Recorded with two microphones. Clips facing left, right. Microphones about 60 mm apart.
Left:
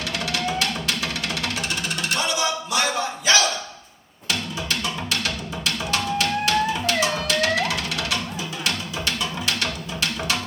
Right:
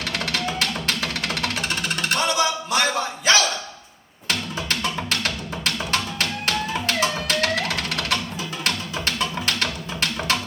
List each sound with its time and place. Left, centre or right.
0.1 s music: right